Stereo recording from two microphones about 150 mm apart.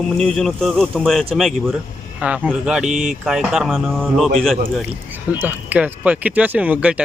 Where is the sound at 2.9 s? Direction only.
55° right (ahead or behind).